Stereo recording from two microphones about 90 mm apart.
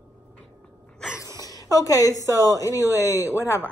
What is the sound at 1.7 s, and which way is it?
Speech, 40° left (ahead or behind).